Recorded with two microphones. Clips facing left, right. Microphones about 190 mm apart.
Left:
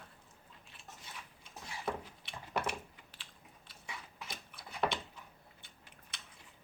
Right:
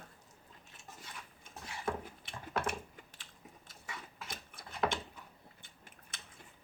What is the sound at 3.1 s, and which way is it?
Mechanisms, 45° right (ahead or behind).